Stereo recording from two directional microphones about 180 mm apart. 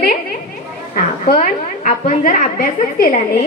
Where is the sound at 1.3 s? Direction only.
45° left (ahead or behind).